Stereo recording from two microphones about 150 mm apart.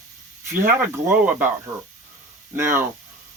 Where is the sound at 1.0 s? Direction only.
10° right (ahead or behind).